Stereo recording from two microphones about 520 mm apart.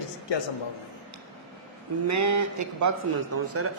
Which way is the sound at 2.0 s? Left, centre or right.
Right.